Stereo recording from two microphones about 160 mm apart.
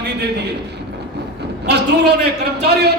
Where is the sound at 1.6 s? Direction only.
90° right.